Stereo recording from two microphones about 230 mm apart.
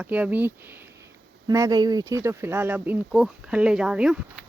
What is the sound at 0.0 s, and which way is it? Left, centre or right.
Speech, centre.